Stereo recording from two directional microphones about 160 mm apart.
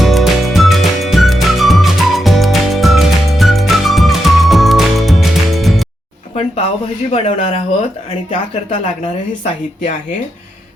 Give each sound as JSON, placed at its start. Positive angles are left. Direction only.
{"t": 0.0, "sound": "music", "side_deg": 0}
{"t": 7.1, "sound": "speech", "side_deg": 35}